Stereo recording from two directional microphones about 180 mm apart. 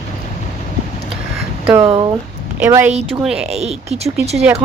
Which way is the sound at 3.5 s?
35° right (ahead or behind).